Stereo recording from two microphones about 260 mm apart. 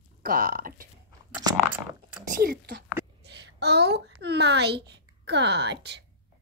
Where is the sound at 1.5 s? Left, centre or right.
Centre.